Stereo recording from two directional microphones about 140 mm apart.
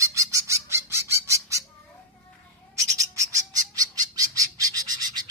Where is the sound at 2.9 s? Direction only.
25° right (ahead or behind).